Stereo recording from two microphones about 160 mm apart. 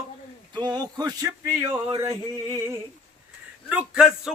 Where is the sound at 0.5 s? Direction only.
25° right (ahead or behind).